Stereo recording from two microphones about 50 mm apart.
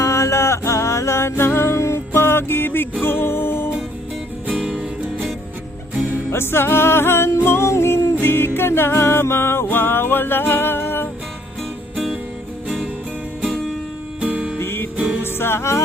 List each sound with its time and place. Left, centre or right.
0.0 s music: left
4.4 s music: right
6.3 s music: left
14.2 s music: right
14.6 s music: left
14.9 s music: right
15.2 s music: left